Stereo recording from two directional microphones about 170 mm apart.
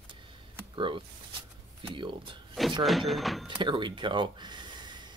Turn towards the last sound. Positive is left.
turn(degrees=-25)  # may be behind; listen again after turning